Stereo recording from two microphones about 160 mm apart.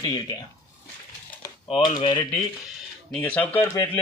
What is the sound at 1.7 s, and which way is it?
Speech, 30° left (ahead or behind).